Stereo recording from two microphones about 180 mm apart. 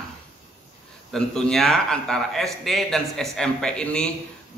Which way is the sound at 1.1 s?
5° left (ahead or behind).